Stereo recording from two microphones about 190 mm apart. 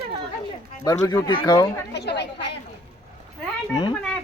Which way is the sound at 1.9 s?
60° left (ahead or behind).